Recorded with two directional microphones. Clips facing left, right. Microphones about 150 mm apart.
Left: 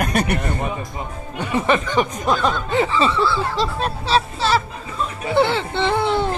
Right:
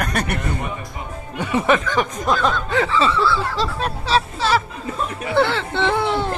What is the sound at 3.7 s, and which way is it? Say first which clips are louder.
Speech: right 1 dB; 10° right (ahead or behind).